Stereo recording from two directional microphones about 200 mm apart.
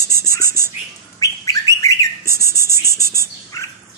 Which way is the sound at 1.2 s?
15° left (ahead or behind).